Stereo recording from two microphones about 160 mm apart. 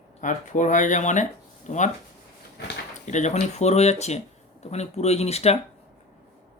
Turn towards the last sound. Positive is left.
turn(degrees=40)  # may be behind; listen again after turning